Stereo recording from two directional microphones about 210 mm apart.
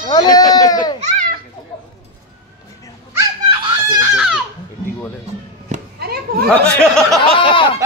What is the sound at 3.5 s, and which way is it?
Giggle, 20° right (ahead or behind).